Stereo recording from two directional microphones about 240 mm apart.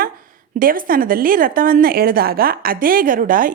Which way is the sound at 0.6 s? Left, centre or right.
Right.